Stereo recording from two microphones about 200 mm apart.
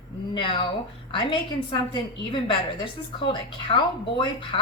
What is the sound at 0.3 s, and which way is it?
Speech, 25° left (ahead or behind).